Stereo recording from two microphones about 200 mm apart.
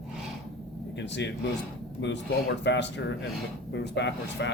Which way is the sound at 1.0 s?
60° left (ahead or behind).